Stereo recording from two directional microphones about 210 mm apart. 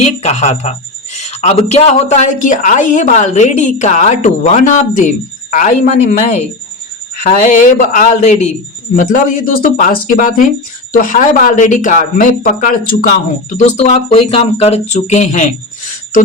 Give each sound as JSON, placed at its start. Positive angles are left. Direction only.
{"t": 0.2, "sound": "speech", "side_deg": 30}